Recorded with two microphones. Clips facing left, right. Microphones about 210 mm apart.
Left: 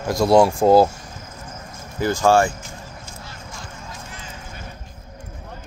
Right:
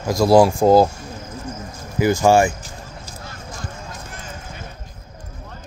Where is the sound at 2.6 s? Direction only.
35° right (ahead or behind).